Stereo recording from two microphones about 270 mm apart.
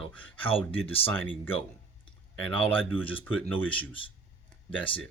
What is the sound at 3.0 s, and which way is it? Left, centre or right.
Speech, centre.